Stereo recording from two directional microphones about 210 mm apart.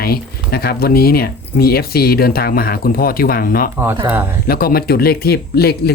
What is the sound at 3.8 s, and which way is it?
Speech, 10° right (ahead or behind).